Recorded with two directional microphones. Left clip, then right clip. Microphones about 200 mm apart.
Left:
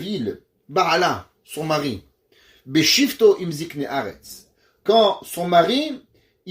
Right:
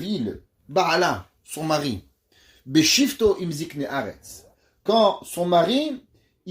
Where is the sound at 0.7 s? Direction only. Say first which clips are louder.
Left 2 dB; 45° right (ahead or behind).